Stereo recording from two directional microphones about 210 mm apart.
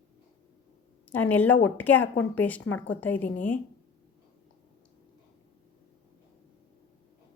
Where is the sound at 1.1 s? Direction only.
10° left (ahead or behind).